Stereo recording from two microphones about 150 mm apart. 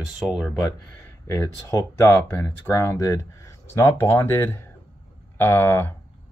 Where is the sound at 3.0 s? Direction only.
20° left (ahead or behind).